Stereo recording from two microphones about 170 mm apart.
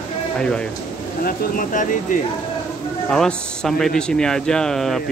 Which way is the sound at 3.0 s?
5° left (ahead or behind).